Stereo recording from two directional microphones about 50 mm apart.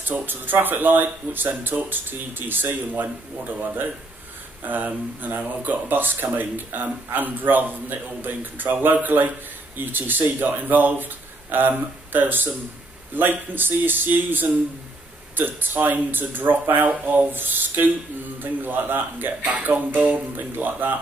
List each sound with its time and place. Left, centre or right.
0.1 s speech: right